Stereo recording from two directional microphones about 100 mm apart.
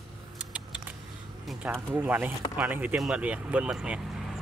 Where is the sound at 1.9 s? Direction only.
20° right (ahead or behind); by 4.3 s 5° right (ahead or behind).